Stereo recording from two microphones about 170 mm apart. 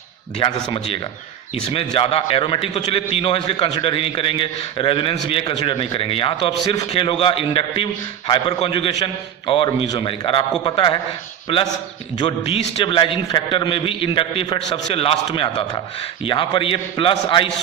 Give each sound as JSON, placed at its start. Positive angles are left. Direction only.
{"t": 0.3, "sound": "a man's voice", "side_deg": 30}
{"t": 11.4, "sound": "a man's voice", "side_deg": 30}